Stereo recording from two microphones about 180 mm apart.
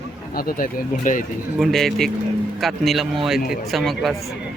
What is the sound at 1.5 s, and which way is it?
Speech, centre (ahead or behind).